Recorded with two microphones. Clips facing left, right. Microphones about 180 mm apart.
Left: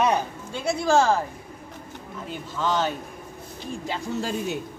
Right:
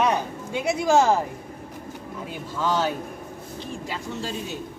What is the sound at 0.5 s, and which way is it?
Speech, 15° right (ahead or behind).